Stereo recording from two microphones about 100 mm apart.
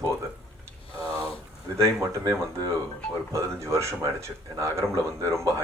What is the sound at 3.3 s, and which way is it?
Speech, 30° right (ahead or behind).